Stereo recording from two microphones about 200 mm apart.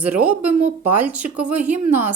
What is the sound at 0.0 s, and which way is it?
Speech, 10° right (ahead or behind).